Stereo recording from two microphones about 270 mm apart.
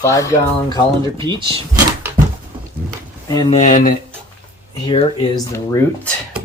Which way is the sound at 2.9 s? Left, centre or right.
Centre.